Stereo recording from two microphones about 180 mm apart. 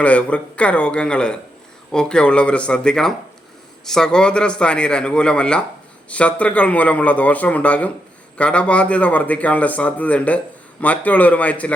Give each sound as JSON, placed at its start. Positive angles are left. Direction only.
{"t": 0.0, "sound": "a man's voice", "side_deg": 5}